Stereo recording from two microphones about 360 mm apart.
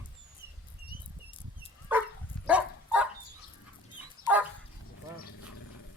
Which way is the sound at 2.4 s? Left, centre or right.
Centre.